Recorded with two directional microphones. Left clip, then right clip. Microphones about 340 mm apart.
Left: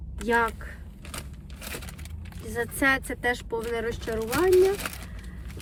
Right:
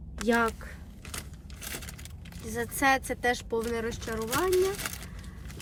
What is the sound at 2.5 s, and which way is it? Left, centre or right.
Speech, centre.